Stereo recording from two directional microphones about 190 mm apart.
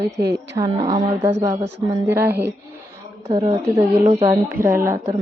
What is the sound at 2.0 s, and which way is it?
A woman's voice, 10° right (ahead or behind).